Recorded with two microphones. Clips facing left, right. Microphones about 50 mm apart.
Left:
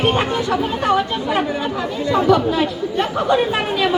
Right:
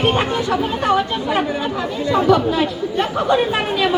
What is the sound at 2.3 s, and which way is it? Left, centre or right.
Speech, right.